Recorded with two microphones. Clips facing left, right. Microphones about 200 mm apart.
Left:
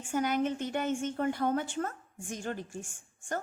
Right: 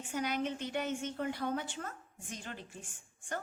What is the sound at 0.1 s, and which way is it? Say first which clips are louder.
A woman's voice: left 6 dB; 50° left (ahead or behind).